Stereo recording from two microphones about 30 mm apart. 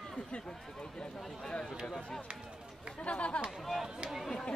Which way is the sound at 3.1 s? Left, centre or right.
Left.